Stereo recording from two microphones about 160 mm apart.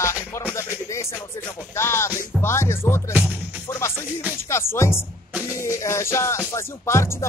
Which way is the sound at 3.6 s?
15° left (ahead or behind).